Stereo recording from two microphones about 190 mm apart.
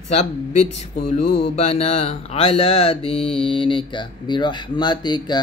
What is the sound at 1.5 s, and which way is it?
Speech, 35° left (ahead or behind).